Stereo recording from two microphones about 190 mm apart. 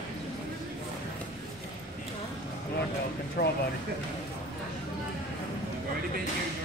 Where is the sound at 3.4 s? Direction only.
60° left (ahead or behind).